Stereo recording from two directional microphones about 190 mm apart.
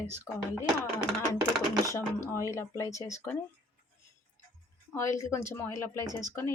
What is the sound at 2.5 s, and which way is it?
Speech, 15° left (ahead or behind).